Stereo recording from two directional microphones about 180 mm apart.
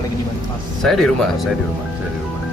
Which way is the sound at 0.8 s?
Centre (ahead or behind).